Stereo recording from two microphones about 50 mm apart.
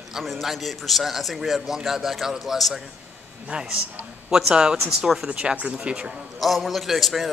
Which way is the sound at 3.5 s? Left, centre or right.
Centre.